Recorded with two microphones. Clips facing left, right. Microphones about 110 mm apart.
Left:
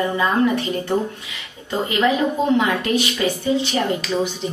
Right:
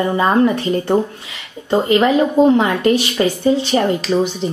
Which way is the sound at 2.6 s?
40° right (ahead or behind).